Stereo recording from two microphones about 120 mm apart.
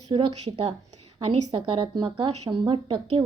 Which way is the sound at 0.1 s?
45° right (ahead or behind).